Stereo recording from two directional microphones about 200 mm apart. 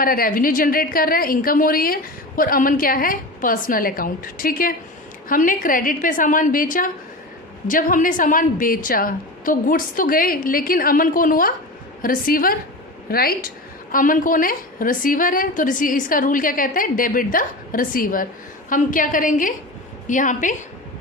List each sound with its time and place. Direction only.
0.0 s a woman's voice: 45° left (ahead or behind)